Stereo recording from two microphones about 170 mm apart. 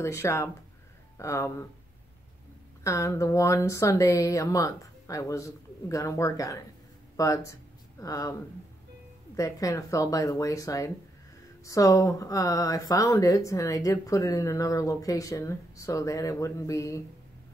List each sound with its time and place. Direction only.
0.0 s speech: 15° left (ahead or behind)
2.8 s speech: 20° left (ahead or behind)